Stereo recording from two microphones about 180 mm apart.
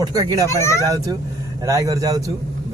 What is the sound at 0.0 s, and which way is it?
Speech, 20° right (ahead or behind).